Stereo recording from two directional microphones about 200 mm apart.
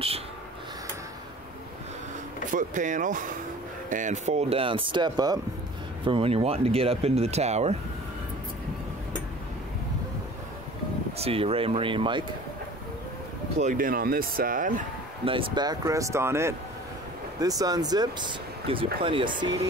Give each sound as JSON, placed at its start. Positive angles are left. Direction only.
{"t": 2.5, "sound": "speech", "side_deg": -40}
{"t": 11.1, "sound": "speech", "side_deg": -30}
{"t": 13.6, "sound": "speech", "side_deg": -40}
{"t": 15.2, "sound": "speech", "side_deg": -25}